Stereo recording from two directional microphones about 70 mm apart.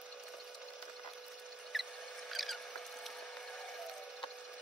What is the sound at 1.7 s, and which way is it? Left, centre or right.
Mouse, centre.